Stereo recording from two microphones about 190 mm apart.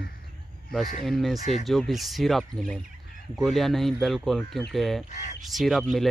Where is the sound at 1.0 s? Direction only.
Centre (ahead or behind).